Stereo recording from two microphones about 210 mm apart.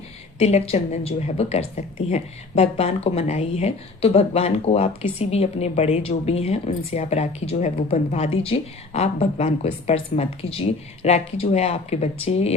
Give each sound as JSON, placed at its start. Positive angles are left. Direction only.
{"t": 0.3, "sound": "a woman's voice", "side_deg": 30}